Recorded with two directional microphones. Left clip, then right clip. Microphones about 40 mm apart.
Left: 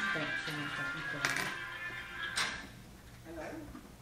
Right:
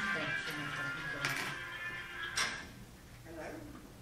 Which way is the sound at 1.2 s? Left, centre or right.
Left.